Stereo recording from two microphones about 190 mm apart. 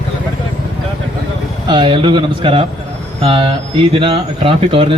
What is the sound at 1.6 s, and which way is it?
Speech, 25° right (ahead or behind).